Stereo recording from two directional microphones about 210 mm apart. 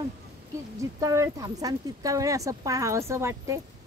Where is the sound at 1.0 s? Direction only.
15° right (ahead or behind).